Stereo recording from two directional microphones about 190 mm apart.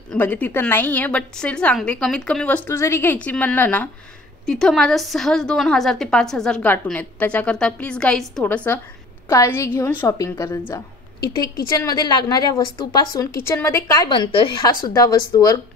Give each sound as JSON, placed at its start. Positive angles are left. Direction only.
{"t": 0.1, "sound": "a woman's voice", "side_deg": 10}
{"t": 11.8, "sound": "a woman's voice", "side_deg": 20}